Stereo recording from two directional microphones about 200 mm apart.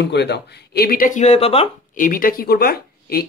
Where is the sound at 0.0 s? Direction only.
60° left (ahead or behind); by 2.0 s 30° left (ahead or behind).